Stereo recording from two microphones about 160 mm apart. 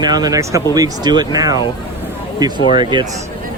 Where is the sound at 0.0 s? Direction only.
25° right (ahead or behind).